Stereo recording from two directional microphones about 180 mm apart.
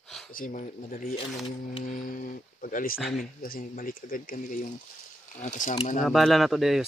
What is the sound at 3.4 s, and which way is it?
Speech, 50° left (ahead or behind).